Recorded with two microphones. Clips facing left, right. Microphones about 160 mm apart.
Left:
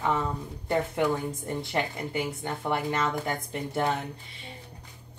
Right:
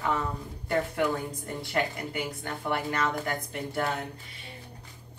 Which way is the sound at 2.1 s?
20° left (ahead or behind).